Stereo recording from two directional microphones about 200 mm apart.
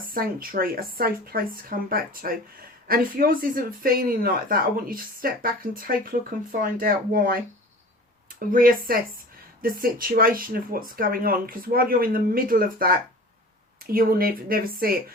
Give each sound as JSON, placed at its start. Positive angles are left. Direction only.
{"t": 0.0, "sound": "speech", "side_deg": -45}
{"t": 8.9, "sound": "speech", "side_deg": -45}